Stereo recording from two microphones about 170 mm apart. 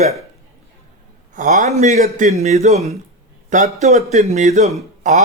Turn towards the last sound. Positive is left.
turn(degrees=-45)  # may be behind; listen again after turning